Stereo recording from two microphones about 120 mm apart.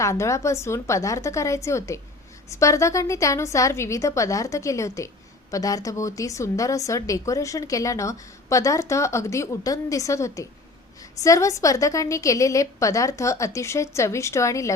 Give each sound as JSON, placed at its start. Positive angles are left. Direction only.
{"t": 0.0, "sound": "a woman's voice", "side_deg": 25}